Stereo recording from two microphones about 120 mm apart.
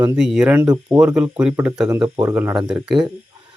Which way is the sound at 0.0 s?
5° right (ahead or behind).